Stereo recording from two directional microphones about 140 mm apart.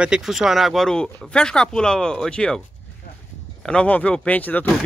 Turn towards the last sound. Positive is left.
turn(degrees=10)  # may be behind; listen again after turning